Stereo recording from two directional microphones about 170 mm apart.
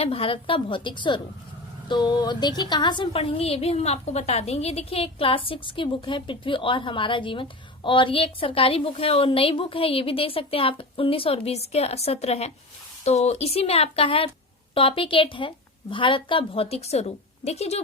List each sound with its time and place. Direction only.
0.0 s a woman's voice: 35° left (ahead or behind)